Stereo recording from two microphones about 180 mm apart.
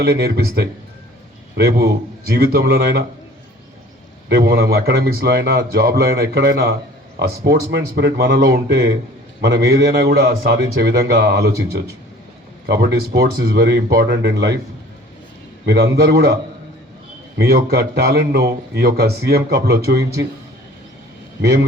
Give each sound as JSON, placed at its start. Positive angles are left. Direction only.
{"t": 0.0, "sound": "a man's voice", "side_deg": -60}
{"t": 4.3, "sound": "a man's voice", "side_deg": -60}
{"t": 15.6, "sound": "a man's voice", "side_deg": -65}
{"t": 17.3, "sound": "a man's voice", "side_deg": -60}